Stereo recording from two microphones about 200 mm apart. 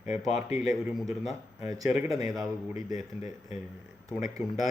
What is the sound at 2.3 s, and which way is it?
Speech, centre (ahead or behind).